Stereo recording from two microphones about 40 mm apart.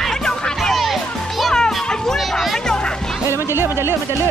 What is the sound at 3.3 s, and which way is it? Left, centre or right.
Music, right.